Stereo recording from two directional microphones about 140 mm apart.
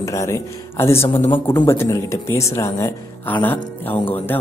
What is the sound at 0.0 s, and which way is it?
Speech, 20° left (ahead or behind).